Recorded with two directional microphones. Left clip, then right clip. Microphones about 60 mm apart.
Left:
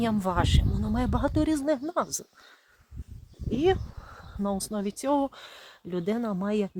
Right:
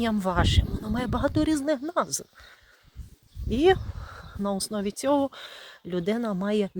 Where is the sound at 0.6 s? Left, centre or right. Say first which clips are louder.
Left 1 dB; left.